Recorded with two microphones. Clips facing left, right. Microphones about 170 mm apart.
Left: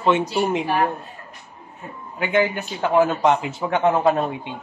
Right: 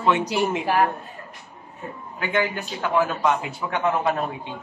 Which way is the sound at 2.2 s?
20° left (ahead or behind).